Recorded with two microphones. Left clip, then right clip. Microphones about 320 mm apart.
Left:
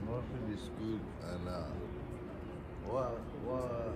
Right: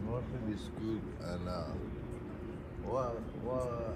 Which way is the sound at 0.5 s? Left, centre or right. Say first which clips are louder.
Right 2 dB; centre.